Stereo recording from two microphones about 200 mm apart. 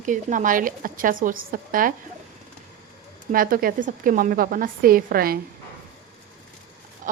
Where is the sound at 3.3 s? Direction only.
45° right (ahead or behind).